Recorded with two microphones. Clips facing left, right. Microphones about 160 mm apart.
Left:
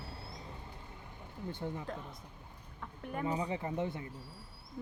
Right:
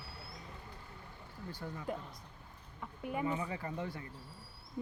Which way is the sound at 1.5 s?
20° left (ahead or behind).